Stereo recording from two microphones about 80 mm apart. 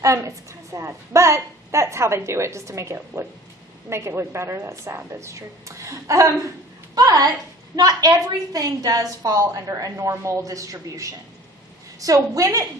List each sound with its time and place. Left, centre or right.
0.0 s a woman's voice: right
6.9 s a woman's voice: right